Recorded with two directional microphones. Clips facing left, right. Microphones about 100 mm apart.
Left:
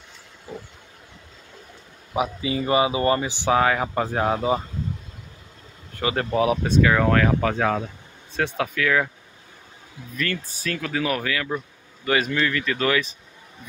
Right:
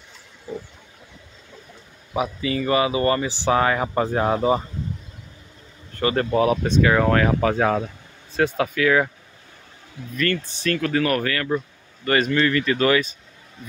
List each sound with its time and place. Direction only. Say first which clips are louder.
2.1 s speech: right 1 dB; 15° left (ahead or behind)
3.5 s speech: even; centre (ahead or behind)
5.9 s speech: right 2 dB; 10° left (ahead or behind); by 9.1 s 5° right (ahead or behind)
10.1 s speech: right 5 dB; 5° left (ahead or behind)